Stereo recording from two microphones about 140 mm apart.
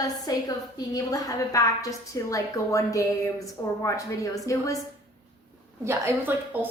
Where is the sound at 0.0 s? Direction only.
25° left (ahead or behind).